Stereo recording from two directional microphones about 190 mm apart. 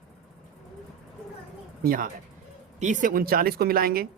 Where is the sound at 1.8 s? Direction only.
50° right (ahead or behind).